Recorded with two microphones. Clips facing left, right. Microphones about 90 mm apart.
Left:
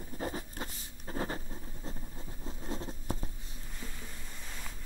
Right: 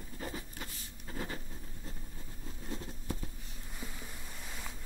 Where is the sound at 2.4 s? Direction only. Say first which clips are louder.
Left 4 dB; 25° left (ahead or behind).